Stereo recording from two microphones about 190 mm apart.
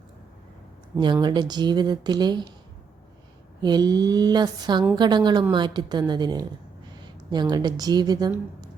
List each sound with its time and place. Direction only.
0.9 s speech: 25° right (ahead or behind)
3.6 s speech: 20° right (ahead or behind)